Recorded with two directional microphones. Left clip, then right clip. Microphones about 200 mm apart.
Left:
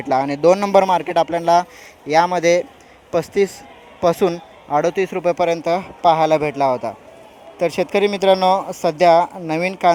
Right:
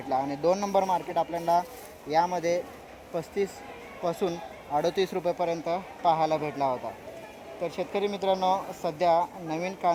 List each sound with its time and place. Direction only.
0.1 s speech: 25° left (ahead or behind)